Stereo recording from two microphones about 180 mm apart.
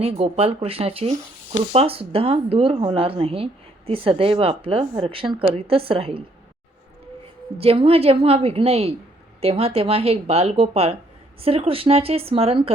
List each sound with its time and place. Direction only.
0.0 s speech: 35° right (ahead or behind)
7.6 s speech: 35° right (ahead or behind)